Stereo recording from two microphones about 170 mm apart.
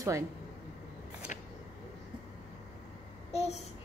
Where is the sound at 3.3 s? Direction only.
40° left (ahead or behind).